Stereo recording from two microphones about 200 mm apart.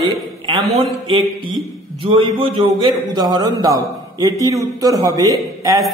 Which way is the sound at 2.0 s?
25° right (ahead or behind).